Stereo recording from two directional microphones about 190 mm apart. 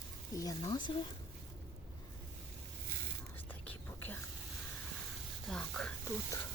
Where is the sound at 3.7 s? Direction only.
10° left (ahead or behind).